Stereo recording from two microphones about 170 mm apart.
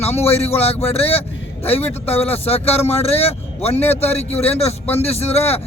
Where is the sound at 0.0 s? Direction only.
40° left (ahead or behind).